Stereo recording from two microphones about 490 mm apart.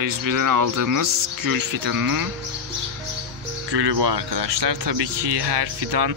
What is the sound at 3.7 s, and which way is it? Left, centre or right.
Speech, right.